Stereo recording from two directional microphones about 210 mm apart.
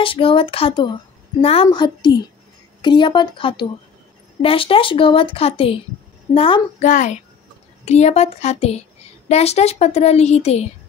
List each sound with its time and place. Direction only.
0.0 s a woman's voice: 25° left (ahead or behind)